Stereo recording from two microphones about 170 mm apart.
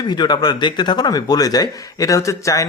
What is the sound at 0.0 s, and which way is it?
Speech, 25° left (ahead or behind).